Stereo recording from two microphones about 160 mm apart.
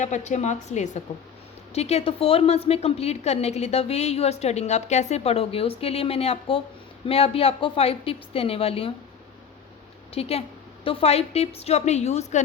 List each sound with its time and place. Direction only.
0.0 s a woman's voice: 45° left (ahead or behind)
10.2 s a woman's voice: 40° left (ahead or behind)